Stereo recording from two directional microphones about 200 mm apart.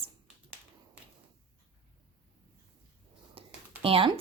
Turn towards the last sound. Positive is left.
turn(degrees=-25)  # may be behind; listen again after turning